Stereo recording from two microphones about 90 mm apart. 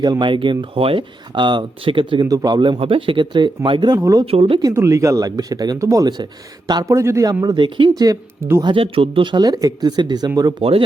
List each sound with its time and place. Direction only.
0.0 s speech: 55° right (ahead or behind)
2.2 s speech: 45° right (ahead or behind)
3.9 s speech: 35° right (ahead or behind)
4.3 s speech: 90° right
4.7 s speech: 35° right (ahead or behind)
7.4 s speech: 60° right (ahead or behind)
8.6 s speech: 85° right; by 9.5 s 60° right (ahead or behind)
9.5 s speech: 40° right (ahead or behind)
10.6 s speech: 90° right